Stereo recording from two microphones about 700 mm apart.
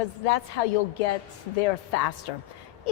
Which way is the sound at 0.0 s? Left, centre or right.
Left.